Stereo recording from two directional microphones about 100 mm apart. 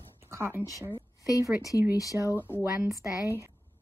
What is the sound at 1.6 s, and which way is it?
Speech, 35° left (ahead or behind).